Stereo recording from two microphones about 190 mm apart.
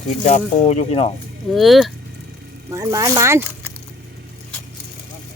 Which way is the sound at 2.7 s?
20° right (ahead or behind).